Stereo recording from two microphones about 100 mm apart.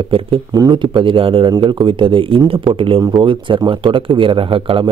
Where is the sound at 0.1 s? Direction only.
60° right (ahead or behind).